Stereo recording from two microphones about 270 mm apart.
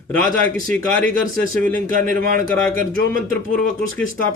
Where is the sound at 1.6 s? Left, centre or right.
Right.